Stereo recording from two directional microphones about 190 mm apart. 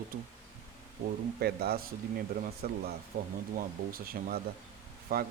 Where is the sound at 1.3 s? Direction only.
55° right (ahead or behind).